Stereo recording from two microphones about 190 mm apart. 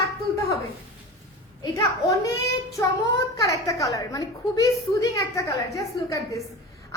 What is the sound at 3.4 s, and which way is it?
A woman's voice, 15° left (ahead or behind).